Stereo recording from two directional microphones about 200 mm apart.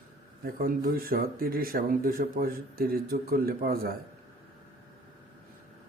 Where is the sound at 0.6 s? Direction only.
45° right (ahead or behind).